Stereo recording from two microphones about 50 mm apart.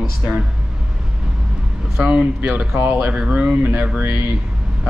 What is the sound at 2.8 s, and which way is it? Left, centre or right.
Speech, right.